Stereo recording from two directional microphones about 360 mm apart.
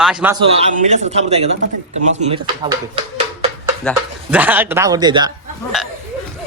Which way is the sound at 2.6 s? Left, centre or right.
Centre.